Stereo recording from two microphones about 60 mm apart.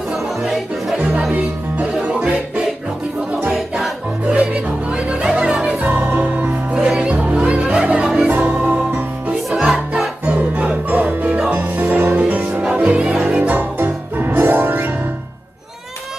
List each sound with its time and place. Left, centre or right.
0.1 s music: centre
1.3 s music: centre
3.5 s music: centre
4.3 s music: centre
6.8 s music: centre
8.5 s music: right
9.5 s music: centre
12.7 s music: centre
13.7 s music: right